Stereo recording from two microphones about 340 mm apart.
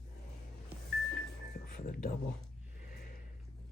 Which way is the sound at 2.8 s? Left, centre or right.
Left.